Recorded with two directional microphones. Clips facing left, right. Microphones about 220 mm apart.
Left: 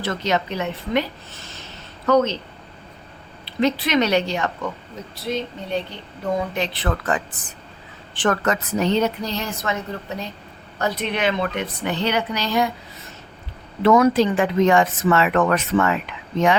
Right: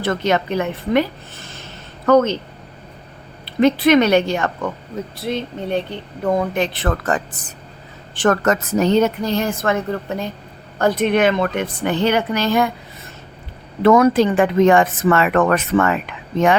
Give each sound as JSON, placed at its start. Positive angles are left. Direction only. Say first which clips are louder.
{"t": 0.0, "sound": "a woman's voice", "louder": "right 4 dB", "side_deg": -55}
{"t": 3.4, "sound": "a woman's voice", "louder": "right 7 dB", "side_deg": -55}
{"t": 13.8, "sound": "a woman's voice", "louder": "right 3 dB", "side_deg": -55}